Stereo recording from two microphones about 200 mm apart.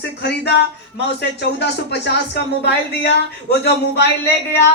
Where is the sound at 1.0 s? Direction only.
60° left (ahead or behind).